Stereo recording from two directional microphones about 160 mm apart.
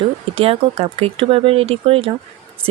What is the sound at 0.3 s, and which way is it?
Speech, 35° right (ahead or behind).